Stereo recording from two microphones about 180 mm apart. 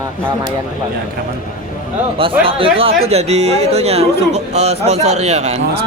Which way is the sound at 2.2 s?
30° right (ahead or behind).